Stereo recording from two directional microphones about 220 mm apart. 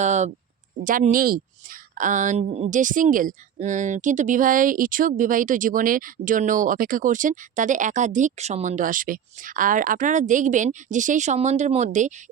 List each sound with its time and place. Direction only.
0.0 s speech: 30° right (ahead or behind)